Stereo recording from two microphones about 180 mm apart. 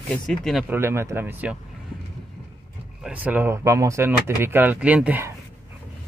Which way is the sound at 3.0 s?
10° right (ahead or behind).